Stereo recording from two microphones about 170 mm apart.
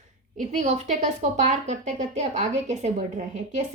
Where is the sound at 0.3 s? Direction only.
45° right (ahead or behind).